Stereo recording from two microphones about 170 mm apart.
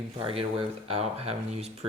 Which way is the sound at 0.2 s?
30° right (ahead or behind).